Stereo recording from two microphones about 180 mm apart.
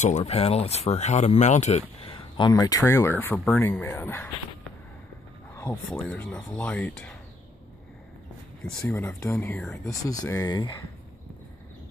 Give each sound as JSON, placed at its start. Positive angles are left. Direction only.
{"t": 0.0, "sound": "speech", "side_deg": 40}
{"t": 2.1, "sound": "speech", "side_deg": 25}
{"t": 5.9, "sound": "speech", "side_deg": 5}
{"t": 8.6, "sound": "speech", "side_deg": 10}
{"t": 9.8, "sound": "speech", "side_deg": 20}